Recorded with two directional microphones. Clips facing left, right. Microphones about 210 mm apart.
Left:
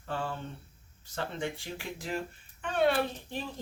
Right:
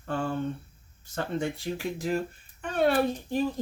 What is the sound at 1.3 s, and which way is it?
Speech, 40° right (ahead or behind).